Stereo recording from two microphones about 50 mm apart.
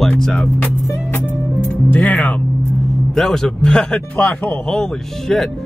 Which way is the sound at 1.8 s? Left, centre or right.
Left.